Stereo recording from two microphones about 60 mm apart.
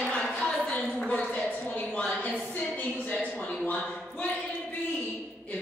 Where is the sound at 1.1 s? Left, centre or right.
Left.